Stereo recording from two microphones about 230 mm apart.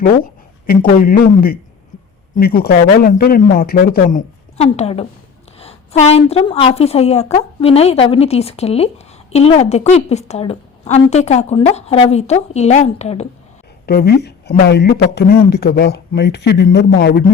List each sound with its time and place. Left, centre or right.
0.7 s a woman's voice: left
13.8 s speech: left